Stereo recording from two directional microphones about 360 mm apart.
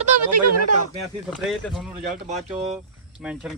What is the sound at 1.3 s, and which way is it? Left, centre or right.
A man's voice, centre.